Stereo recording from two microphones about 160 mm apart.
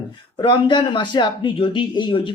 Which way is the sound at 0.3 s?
30° left (ahead or behind).